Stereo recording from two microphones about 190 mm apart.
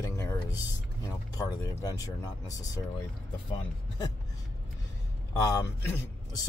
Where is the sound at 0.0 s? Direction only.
15° left (ahead or behind).